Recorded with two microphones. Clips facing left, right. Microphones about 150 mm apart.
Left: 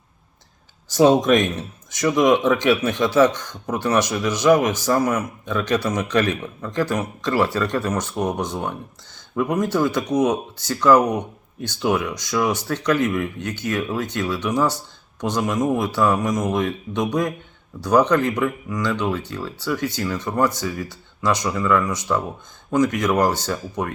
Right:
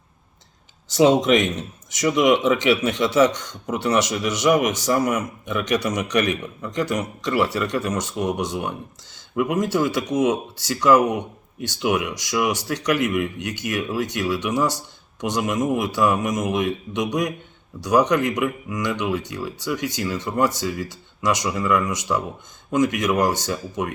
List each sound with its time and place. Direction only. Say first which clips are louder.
0.9 s speech: left 1 dB; 20° right (ahead or behind)